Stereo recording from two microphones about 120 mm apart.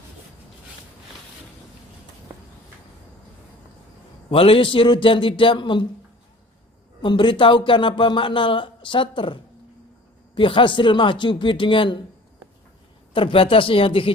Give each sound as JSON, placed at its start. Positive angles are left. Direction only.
{"t": 4.3, "sound": "speech", "side_deg": 50}
{"t": 7.0, "sound": "speech", "side_deg": 45}
{"t": 13.1, "sound": "speech", "side_deg": 45}